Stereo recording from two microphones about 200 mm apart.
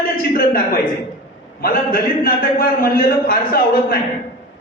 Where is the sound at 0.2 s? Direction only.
45° left (ahead or behind).